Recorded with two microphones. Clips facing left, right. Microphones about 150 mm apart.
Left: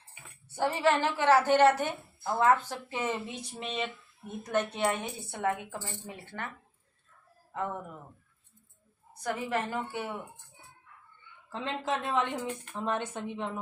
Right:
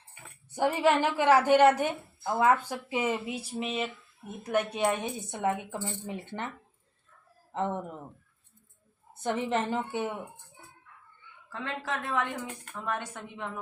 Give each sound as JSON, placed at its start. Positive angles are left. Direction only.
{"t": 0.5, "sound": "a woman's voice", "side_deg": -15}
{"t": 7.5, "sound": "speech", "side_deg": -25}
{"t": 9.1, "sound": "speech", "side_deg": -25}
{"t": 11.4, "sound": "a woman's voice", "side_deg": 20}